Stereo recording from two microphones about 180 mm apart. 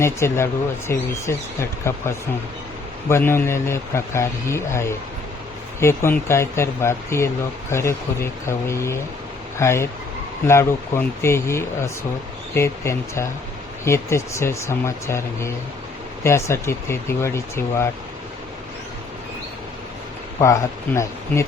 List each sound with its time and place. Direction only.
0.0 s a man's voice: 15° left (ahead or behind)
3.1 s a man's voice: 15° left (ahead or behind)
20.4 s a man's voice: 15° left (ahead or behind)